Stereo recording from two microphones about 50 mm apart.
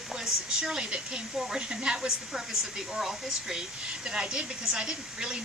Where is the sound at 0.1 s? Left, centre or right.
Centre.